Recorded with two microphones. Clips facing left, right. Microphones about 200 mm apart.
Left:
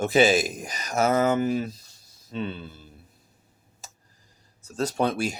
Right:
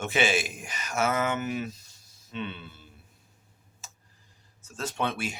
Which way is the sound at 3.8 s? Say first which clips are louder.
Left 3 dB; 40° left (ahead or behind).